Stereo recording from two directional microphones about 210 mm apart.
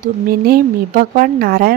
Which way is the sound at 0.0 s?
40° right (ahead or behind).